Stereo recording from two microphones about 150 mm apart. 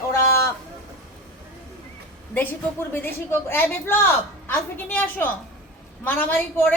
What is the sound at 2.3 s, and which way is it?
A woman's voice, 15° left (ahead or behind).